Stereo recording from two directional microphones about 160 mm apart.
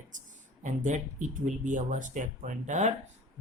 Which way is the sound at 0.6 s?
50° right (ahead or behind).